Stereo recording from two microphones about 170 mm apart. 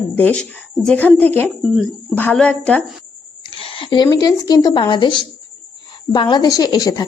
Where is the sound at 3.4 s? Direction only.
35° left (ahead or behind).